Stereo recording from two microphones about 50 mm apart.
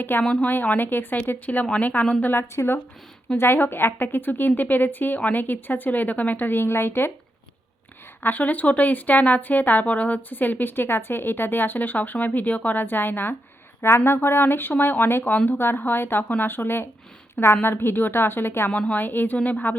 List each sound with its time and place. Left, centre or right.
0.0 s a woman's voice: left
2.3 s a woman's voice: left
8.2 s a woman's voice: left
18.7 s a woman's voice: left
18.9 s a woman's voice: left